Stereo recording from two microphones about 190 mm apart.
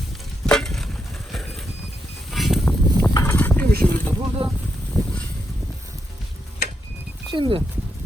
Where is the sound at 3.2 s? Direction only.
10° left (ahead or behind).